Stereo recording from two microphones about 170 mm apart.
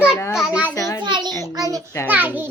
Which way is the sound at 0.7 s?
20° left (ahead or behind).